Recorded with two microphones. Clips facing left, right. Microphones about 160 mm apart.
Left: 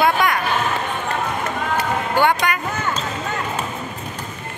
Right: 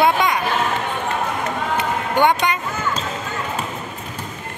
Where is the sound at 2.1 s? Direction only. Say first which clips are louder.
Right 2 dB; 20° right (ahead or behind).